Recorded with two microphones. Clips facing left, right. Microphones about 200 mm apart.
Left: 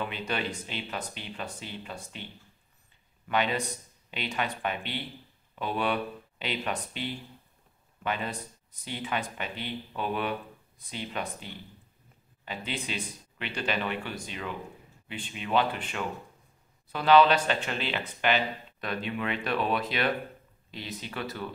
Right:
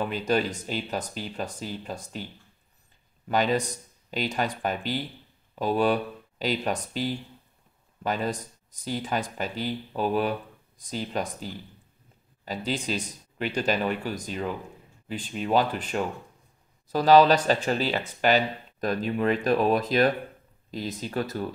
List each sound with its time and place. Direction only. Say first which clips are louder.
0.0 s speech: right 7 dB; 40° right (ahead or behind)
3.3 s speech: right 4 dB; 40° right (ahead or behind)